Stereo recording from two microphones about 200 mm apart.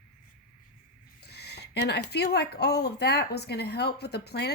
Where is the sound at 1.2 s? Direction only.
55° left (ahead or behind).